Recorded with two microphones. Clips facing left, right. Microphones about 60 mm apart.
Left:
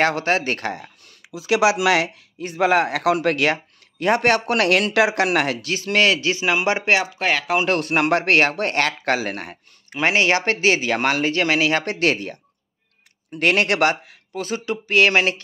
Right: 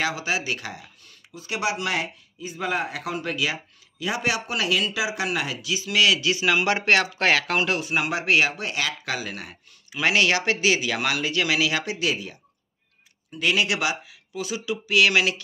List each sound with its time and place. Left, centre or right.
0.0 s speech: left
1.3 s speech: left
2.3 s speech: left
4.0 s speech: left
7.2 s speech: centre
7.8 s speech: left
11.8 s speech: left